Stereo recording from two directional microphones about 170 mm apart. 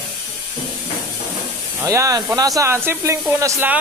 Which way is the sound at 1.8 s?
20° right (ahead or behind).